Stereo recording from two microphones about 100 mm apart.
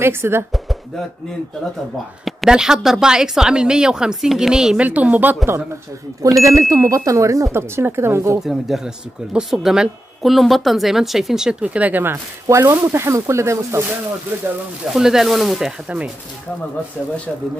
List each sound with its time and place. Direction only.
0.0 s speech: 25° right (ahead or behind)
0.5 s speech: centre (ahead or behind)
2.2 s speech: 5° right (ahead or behind)
6.4 s speech: 30° right (ahead or behind)
8.4 s speech: 5° right (ahead or behind); by 14.5 s 20° right (ahead or behind)
14.9 s speech: 5° right (ahead or behind)